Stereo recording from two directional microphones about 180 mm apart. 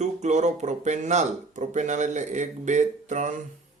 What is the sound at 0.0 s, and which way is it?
Speech, 40° right (ahead or behind).